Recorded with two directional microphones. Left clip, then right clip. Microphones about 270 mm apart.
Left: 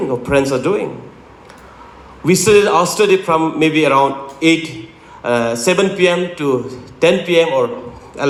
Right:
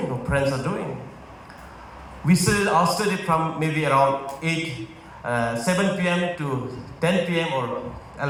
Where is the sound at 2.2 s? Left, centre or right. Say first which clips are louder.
Left 12 dB; left.